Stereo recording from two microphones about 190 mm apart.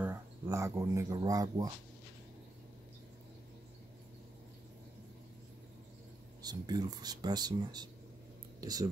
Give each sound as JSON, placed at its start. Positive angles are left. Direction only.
{"t": 0.0, "sound": "speech", "side_deg": -15}
{"t": 6.4, "sound": "speech", "side_deg": -20}